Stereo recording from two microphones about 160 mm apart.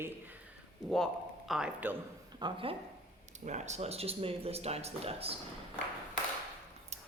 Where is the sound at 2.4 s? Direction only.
30° right (ahead or behind).